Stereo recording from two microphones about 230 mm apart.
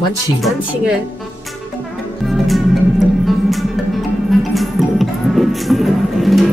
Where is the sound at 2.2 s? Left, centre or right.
Centre.